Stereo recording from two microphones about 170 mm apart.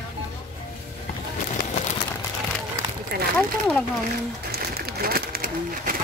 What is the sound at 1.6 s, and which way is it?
Clip-clop, 75° left (ahead or behind).